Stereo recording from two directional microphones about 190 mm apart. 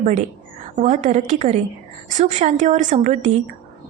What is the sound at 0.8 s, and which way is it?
A woman's voice, 40° right (ahead or behind).